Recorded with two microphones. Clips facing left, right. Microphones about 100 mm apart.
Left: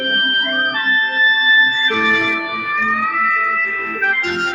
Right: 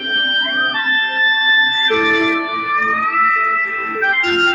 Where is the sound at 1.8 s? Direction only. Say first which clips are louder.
Right 3 dB; 10° right (ahead or behind).